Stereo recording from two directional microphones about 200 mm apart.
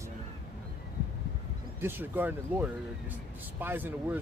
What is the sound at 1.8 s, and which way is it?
Speech, 10° right (ahead or behind).